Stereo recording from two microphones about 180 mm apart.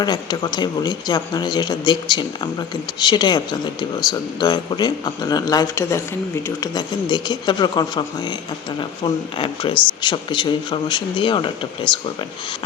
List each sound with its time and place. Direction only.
0.0 s speech: 25° left (ahead or behind)